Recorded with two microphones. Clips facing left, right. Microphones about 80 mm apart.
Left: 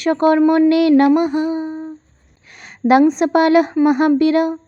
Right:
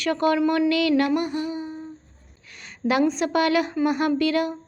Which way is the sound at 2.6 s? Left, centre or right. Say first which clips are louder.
Left 10 dB; left.